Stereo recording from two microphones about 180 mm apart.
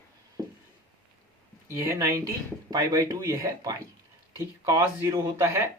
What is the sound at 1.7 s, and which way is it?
Speech, 15° right (ahead or behind).